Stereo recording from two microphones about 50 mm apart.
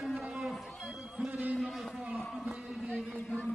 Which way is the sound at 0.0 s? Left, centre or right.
Centre.